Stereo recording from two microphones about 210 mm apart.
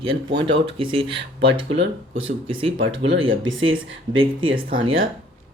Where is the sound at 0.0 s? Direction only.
25° right (ahead or behind).